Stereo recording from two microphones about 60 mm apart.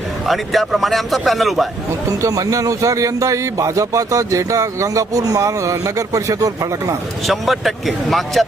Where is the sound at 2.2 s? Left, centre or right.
Right.